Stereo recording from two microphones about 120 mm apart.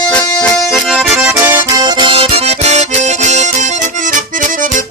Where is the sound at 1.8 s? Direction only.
40° right (ahead or behind); by 3.7 s 80° right.